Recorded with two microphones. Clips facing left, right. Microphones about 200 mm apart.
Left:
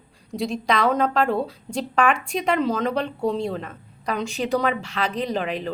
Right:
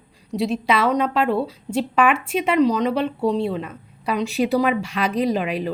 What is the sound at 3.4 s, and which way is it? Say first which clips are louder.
Speech: right 3 dB; 40° left (ahead or behind).